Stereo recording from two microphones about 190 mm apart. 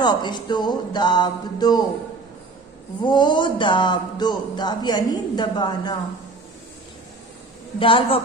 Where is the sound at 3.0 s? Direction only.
25° left (ahead or behind).